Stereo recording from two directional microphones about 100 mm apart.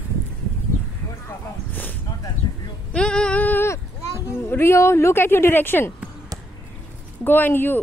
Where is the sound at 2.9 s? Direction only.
10° left (ahead or behind).